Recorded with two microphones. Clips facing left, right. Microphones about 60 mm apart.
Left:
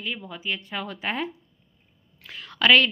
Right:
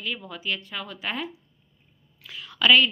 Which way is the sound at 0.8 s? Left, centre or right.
Left.